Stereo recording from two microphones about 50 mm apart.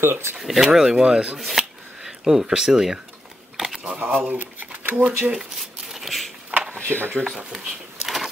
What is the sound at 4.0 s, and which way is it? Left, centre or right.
Speech, right.